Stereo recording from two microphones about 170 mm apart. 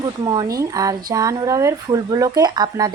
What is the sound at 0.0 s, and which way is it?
A woman's voice, 25° right (ahead or behind).